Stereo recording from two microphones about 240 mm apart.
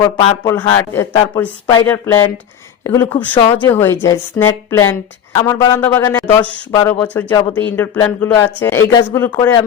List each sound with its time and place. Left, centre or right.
0.0 s a man's voice: centre